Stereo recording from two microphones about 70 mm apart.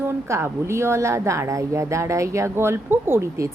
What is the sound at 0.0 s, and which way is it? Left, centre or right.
A woman's voice, right.